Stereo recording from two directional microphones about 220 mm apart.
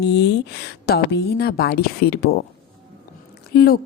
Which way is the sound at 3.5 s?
45° left (ahead or behind).